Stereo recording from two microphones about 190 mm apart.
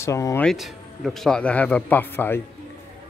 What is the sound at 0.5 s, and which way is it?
Speech, centre (ahead or behind).